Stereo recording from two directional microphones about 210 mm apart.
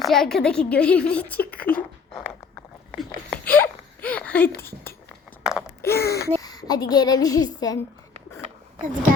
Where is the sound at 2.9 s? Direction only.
5° left (ahead or behind).